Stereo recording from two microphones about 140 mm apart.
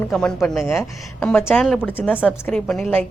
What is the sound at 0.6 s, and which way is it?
Speech, 20° left (ahead or behind).